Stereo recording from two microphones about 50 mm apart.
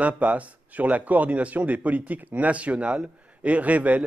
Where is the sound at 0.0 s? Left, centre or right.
Right.